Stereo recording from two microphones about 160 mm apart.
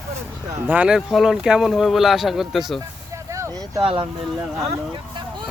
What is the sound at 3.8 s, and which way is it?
Speech, 35° right (ahead or behind).